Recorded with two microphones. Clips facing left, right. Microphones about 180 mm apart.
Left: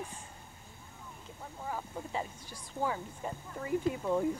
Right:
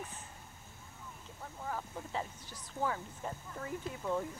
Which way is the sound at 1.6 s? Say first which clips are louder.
Left 2 dB; 10° left (ahead or behind).